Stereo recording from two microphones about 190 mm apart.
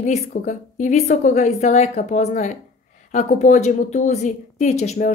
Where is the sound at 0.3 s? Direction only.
40° left (ahead or behind).